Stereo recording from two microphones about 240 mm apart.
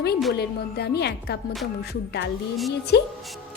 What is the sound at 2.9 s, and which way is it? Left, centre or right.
Speech, left.